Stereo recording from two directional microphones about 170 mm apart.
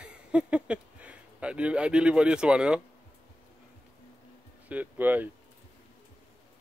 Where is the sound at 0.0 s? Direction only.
5° right (ahead or behind).